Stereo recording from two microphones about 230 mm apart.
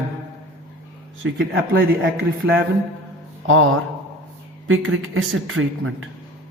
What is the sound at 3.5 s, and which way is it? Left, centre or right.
Speech, right.